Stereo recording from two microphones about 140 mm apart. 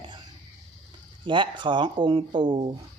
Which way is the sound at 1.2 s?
35° right (ahead or behind).